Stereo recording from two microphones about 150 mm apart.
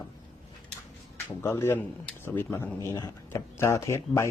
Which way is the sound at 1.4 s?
15° left (ahead or behind).